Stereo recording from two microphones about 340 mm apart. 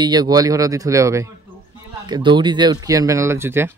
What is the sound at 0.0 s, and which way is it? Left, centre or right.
Speech, centre.